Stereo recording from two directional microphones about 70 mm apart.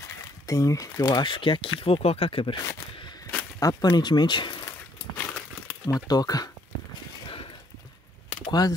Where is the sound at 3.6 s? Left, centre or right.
Left.